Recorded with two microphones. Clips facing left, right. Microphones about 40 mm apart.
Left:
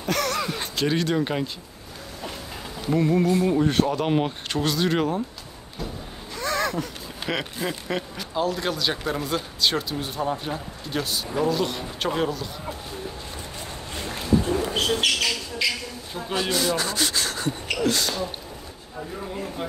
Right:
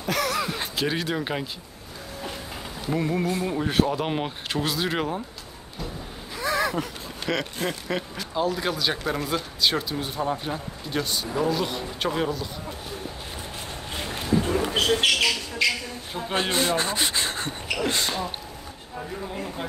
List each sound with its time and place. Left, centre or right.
0.0 s a sound: centre
2.8 s speech: centre
6.3 s a sound: centre
7.3 s speech: centre
14.7 s bird: right
16.3 s speech: right